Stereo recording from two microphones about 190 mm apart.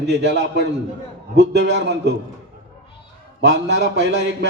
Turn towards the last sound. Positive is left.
turn(degrees=-65)  # may be behind; listen again after turning